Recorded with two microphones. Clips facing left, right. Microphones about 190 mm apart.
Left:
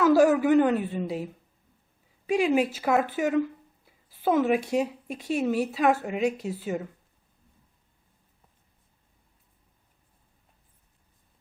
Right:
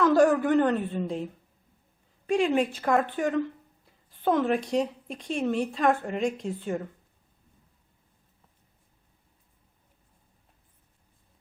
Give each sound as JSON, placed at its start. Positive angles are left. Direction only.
{"t": 0.0, "sound": "a woman's voice", "side_deg": 5}